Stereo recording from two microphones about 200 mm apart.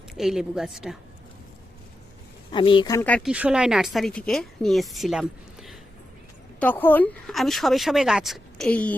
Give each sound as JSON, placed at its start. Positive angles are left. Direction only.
{"t": 0.1, "sound": "a woman's voice", "side_deg": 0}
{"t": 2.5, "sound": "speech", "side_deg": 25}
{"t": 3.2, "sound": "a woman's voice", "side_deg": -5}
{"t": 6.6, "sound": "a woman's voice", "side_deg": 10}